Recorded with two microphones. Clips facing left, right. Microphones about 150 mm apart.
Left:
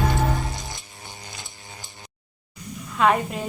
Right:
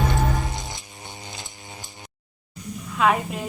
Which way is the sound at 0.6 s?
20° right (ahead or behind).